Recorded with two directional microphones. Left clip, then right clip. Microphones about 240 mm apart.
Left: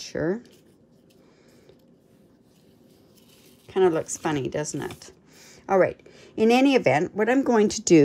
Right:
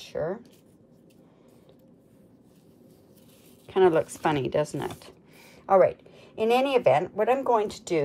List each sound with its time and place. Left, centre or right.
0.0 s speech: left
3.6 s a woman's voice: centre
5.7 s speech: left